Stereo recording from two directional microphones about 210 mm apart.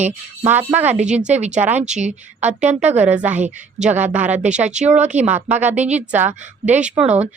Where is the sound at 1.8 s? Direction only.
35° right (ahead or behind).